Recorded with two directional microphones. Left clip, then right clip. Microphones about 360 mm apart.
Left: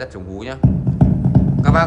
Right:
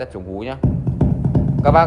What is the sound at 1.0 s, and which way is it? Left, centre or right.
Music, centre.